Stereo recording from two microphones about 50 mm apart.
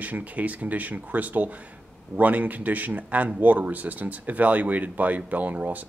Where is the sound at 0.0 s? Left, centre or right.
Right.